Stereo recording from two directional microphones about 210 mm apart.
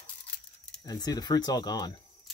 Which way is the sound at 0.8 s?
20° left (ahead or behind).